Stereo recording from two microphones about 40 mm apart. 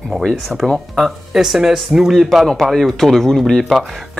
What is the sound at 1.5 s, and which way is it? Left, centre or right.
Speech, centre.